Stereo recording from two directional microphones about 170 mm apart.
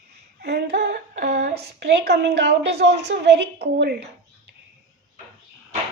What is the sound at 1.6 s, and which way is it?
A woman's voice, 75° right (ahead or behind).